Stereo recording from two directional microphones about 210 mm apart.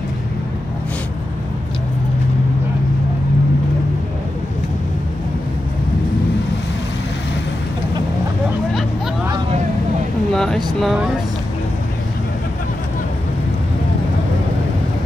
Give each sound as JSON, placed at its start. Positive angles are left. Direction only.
{"t": 9.3, "sound": "vehicle", "side_deg": -30}
{"t": 10.3, "sound": "speech", "side_deg": 0}